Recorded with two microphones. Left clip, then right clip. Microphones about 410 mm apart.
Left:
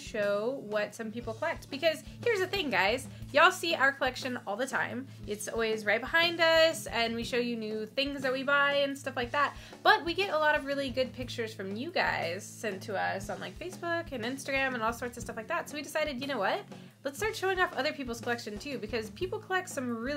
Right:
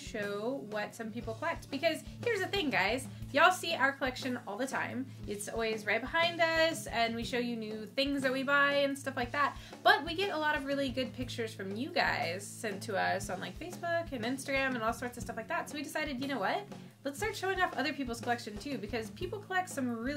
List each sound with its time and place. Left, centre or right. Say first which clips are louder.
0.1 s speech: left 6 dB; left
13.8 s speech: even; left